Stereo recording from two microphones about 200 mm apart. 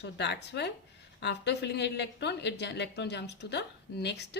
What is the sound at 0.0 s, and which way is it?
A woman's voice, 60° left (ahead or behind).